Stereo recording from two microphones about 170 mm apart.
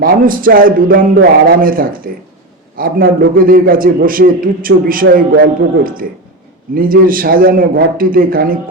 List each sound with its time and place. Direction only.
0.0 s a man's voice: 55° right (ahead or behind)